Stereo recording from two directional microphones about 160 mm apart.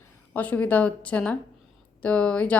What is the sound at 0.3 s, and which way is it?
A woman's voice, 10° left (ahead or behind).